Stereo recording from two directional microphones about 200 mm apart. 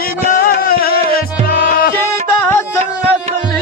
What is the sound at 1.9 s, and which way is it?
Music, 10° left (ahead or behind).